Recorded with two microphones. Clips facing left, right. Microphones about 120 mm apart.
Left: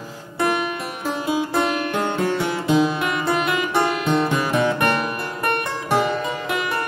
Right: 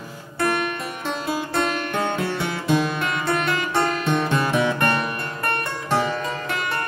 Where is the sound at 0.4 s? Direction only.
10° left (ahead or behind).